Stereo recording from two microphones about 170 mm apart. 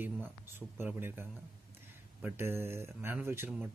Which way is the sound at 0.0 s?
15° right (ahead or behind).